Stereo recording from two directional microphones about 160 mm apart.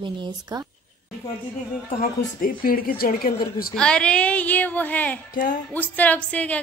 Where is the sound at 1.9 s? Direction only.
60° left (ahead or behind).